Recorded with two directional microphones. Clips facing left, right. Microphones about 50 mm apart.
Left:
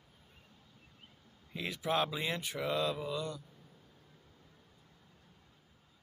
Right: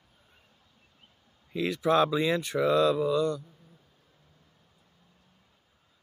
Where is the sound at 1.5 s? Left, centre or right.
Right.